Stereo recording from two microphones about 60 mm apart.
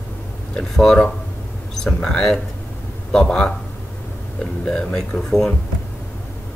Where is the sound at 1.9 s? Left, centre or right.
Centre.